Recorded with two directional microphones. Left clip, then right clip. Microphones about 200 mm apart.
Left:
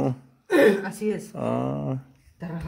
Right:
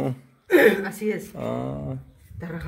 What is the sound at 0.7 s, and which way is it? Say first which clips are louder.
Speech: right 1 dB; 60° left (ahead or behind).